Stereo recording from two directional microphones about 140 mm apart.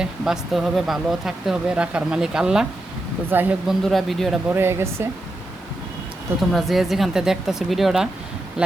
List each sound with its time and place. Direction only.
0.0 s speech: centre (ahead or behind)
3.7 s speech: centre (ahead or behind)
4.4 s speech: 15° right (ahead or behind)
6.5 s speech: centre (ahead or behind)